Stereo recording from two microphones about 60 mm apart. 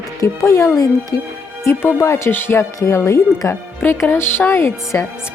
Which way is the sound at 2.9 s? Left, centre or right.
Left.